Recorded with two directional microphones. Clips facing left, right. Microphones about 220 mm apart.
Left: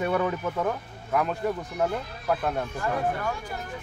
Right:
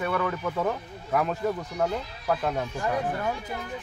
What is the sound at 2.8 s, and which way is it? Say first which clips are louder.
Speech: even; 20° right (ahead or behind).